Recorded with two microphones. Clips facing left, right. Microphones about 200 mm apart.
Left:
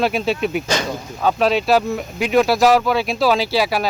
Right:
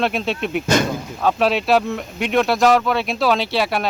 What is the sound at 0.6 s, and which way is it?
Speech, 55° right (ahead or behind).